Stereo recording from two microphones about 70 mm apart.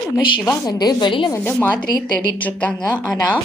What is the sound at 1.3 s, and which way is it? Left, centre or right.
A woman's voice, left.